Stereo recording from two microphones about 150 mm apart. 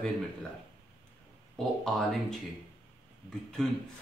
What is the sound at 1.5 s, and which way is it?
Speech, 5° left (ahead or behind).